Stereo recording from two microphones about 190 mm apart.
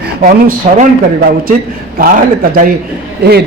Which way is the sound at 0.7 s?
50° right (ahead or behind).